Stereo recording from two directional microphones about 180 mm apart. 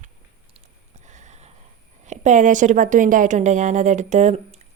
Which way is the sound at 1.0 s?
40° right (ahead or behind).